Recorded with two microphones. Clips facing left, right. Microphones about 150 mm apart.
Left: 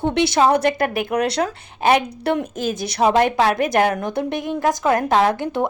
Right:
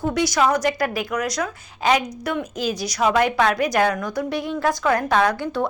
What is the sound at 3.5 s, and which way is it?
Speech, 50° left (ahead or behind).